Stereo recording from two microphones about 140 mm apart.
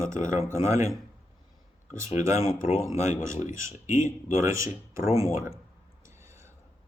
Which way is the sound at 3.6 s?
60° left (ahead or behind).